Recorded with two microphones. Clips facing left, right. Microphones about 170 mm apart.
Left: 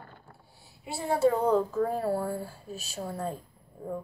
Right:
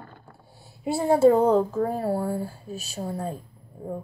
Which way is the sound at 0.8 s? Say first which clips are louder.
Right 7 dB; 45° right (ahead or behind).